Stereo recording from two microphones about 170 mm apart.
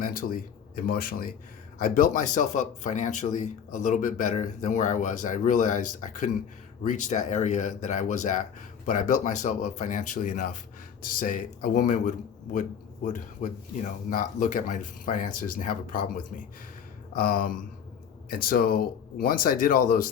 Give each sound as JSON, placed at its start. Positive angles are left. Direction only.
{"t": 0.0, "sound": "speech", "side_deg": 55}